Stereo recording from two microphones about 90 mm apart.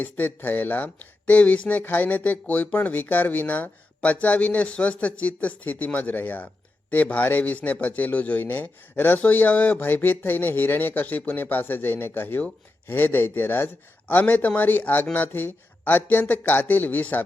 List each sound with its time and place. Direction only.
0.0 s speech: 20° left (ahead or behind)